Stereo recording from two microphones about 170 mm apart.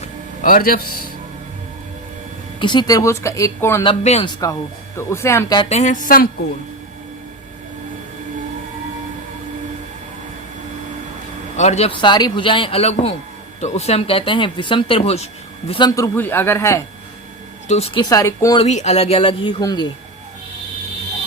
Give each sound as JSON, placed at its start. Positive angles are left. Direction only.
{"t": 0.0, "sound": "a sound", "side_deg": 50}
{"t": 2.6, "sound": "speech", "side_deg": 25}
{"t": 3.8, "sound": "speech", "side_deg": 35}
{"t": 4.9, "sound": "speech", "side_deg": 15}
{"t": 5.6, "sound": "a woman's voice", "side_deg": 45}
{"t": 11.5, "sound": "speech", "side_deg": 40}
{"t": 16.0, "sound": "speech", "side_deg": 10}
{"t": 17.7, "sound": "speech", "side_deg": 35}
{"t": 18.0, "sound": "speech", "side_deg": 20}
{"t": 18.5, "sound": "speech", "side_deg": 40}